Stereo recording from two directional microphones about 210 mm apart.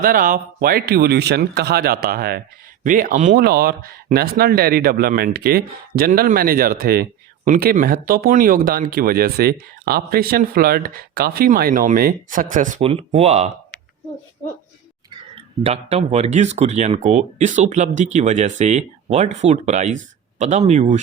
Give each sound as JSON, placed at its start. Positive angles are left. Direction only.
{"t": 0.0, "sound": "speech", "side_deg": -45}
{"t": 15.4, "sound": "speech", "side_deg": -30}